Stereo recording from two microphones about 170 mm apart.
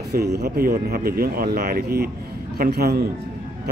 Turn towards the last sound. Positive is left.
turn(degrees=-70)  # may be behind; listen again after turning